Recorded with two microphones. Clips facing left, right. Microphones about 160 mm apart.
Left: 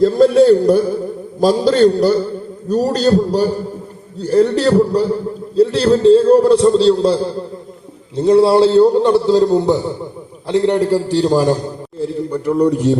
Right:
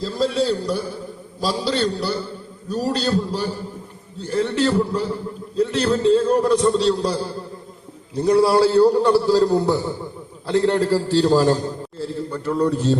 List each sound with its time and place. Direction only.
0.0 s a man's voice: 55° left (ahead or behind); by 13.0 s 15° left (ahead or behind)